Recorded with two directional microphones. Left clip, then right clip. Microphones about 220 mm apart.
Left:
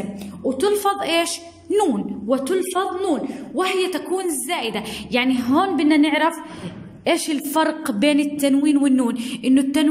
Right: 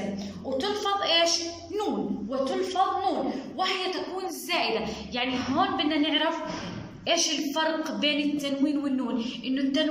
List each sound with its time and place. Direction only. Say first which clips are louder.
0.6 s a woman's voice: left 7 dB; 55° left (ahead or behind)
4.5 s a woman's voice: left 2 dB; 40° left (ahead or behind)